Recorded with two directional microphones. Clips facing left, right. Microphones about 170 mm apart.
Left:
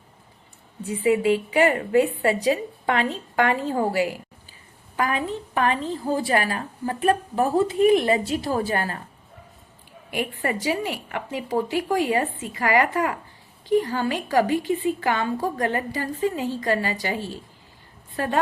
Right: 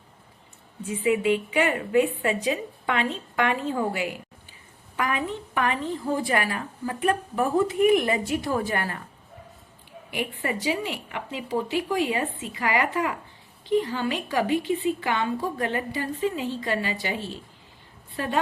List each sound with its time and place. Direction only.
1.0 s a woman's voice: 35° left (ahead or behind)
10.1 s a woman's voice: 45° left (ahead or behind)